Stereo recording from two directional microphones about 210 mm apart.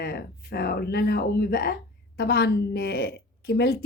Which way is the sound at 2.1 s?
45° left (ahead or behind).